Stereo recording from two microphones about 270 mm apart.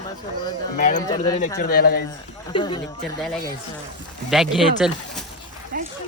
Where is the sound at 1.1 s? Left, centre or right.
Centre.